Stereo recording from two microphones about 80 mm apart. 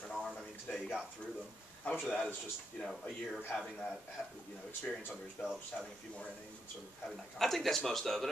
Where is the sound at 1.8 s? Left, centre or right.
Left.